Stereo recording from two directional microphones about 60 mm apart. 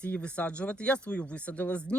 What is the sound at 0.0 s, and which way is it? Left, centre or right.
Speech, left.